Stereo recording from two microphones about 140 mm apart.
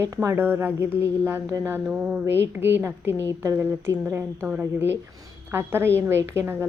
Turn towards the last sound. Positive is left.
turn(degrees=-15)  # may be behind; listen again after turning